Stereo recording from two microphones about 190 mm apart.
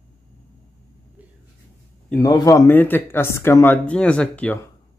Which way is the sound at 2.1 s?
15° left (ahead or behind).